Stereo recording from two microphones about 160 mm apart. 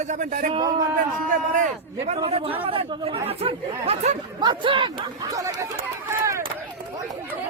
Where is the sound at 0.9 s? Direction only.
55° right (ahead or behind).